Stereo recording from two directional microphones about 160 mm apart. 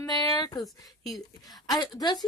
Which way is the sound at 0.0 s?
25° left (ahead or behind).